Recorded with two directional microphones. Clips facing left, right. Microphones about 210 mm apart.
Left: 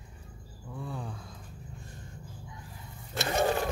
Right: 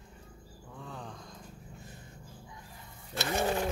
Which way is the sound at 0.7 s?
10° left (ahead or behind).